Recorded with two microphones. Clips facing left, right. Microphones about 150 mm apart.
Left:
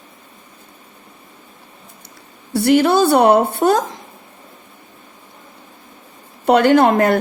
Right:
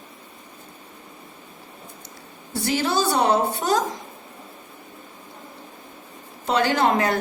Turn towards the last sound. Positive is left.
turn(degrees=55)  # may be behind; listen again after turning